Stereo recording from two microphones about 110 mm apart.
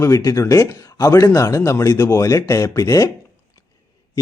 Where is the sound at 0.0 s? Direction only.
30° left (ahead or behind).